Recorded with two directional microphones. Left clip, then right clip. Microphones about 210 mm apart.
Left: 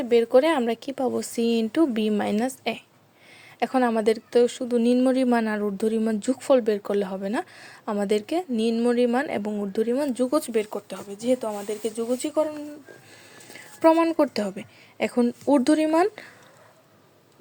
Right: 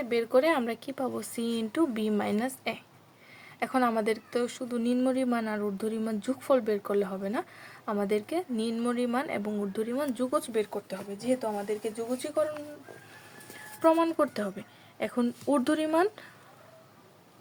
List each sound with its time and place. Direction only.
0.0 s a woman's voice: 30° left (ahead or behind)
3.6 s a woman's voice: 25° left (ahead or behind)
13.8 s a woman's voice: 20° left (ahead or behind)